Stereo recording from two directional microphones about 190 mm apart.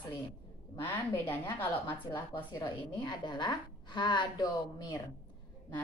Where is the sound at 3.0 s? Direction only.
25° left (ahead or behind).